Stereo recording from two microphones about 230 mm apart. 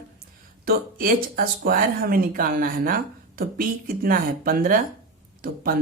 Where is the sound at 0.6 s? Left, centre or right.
Right.